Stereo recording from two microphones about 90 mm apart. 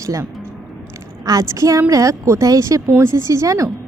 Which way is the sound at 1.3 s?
40° right (ahead or behind).